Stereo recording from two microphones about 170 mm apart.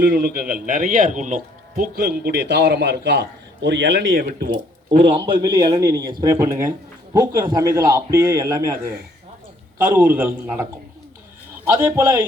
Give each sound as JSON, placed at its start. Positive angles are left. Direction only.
{"t": 0.0, "sound": "a man's voice", "side_deg": -60}
{"t": 4.3, "sound": "a man's voice", "side_deg": -60}
{"t": 5.1, "sound": "a man's voice", "side_deg": -25}
{"t": 9.7, "sound": "a man's voice", "side_deg": -10}